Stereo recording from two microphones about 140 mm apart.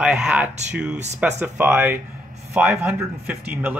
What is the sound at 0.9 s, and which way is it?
Speech, 55° right (ahead or behind).